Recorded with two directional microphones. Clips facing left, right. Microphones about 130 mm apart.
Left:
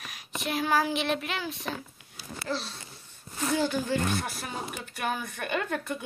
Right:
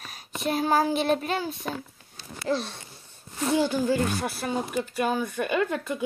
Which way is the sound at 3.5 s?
15° right (ahead or behind).